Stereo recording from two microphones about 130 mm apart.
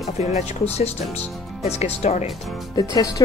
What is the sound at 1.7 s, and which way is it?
Speech, 55° left (ahead or behind).